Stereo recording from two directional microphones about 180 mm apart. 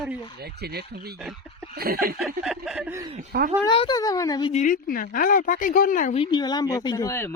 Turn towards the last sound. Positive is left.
turn(degrees=15)  # may be behind; listen again after turning